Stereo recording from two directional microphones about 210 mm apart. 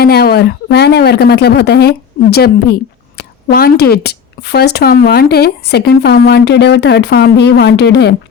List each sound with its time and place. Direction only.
0.0 s speech: 50° left (ahead or behind)